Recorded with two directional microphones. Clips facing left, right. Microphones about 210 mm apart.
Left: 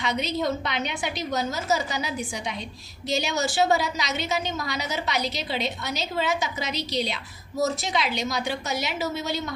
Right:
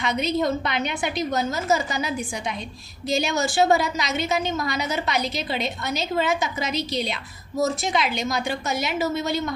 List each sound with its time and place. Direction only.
0.0 s a woman's voice: 50° right (ahead or behind)